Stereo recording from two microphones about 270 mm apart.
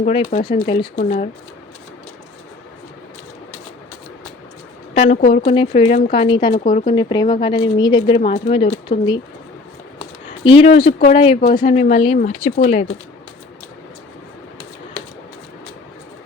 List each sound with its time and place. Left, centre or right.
0.0 s speech: left
4.9 s speech: left
6.7 s speech: left
6.9 s a woman's voice: centre
10.6 s speech: left